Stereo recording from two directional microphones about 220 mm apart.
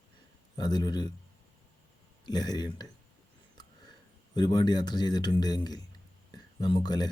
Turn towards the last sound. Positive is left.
turn(degrees=20)  # may be behind; listen again after turning